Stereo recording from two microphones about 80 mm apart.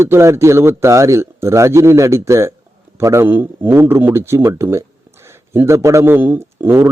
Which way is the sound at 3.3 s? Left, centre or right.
Right.